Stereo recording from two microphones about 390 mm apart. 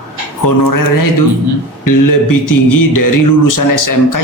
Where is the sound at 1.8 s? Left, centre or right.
Left.